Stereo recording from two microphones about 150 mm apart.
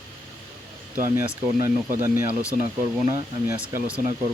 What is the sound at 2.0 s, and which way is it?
Speech, 15° right (ahead or behind).